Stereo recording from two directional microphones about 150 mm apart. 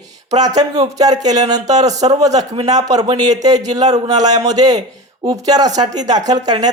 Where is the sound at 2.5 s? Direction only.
45° right (ahead or behind).